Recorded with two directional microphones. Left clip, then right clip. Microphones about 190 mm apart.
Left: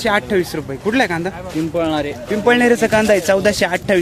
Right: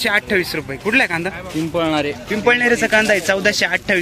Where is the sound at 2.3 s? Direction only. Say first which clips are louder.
Left 2 dB; 20° left (ahead or behind).